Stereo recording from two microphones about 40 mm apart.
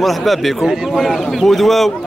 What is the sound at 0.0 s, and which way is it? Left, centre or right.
Speech, centre.